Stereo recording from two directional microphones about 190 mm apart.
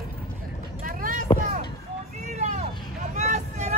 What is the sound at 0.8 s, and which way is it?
Vehicle, 45° right (ahead or behind).